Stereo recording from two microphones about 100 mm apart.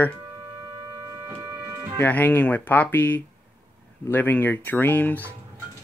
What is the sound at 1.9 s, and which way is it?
Speech, 15° left (ahead or behind).